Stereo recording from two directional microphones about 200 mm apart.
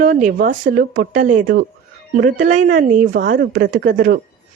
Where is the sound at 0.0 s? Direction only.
40° right (ahead or behind).